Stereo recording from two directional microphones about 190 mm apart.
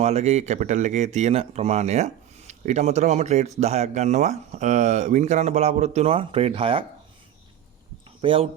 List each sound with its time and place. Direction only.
0.0 s speech: 35° right (ahead or behind)
8.2 s speech: 25° right (ahead or behind)